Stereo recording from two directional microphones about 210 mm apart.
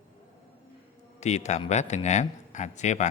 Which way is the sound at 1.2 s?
30° left (ahead or behind).